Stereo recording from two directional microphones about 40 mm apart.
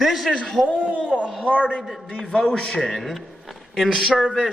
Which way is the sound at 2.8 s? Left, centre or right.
Centre.